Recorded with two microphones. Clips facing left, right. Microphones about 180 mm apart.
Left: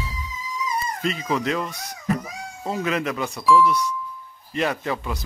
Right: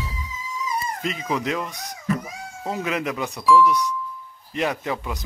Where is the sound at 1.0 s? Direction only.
15° right (ahead or behind).